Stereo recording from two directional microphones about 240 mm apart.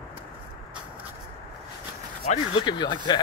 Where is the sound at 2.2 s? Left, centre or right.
Centre.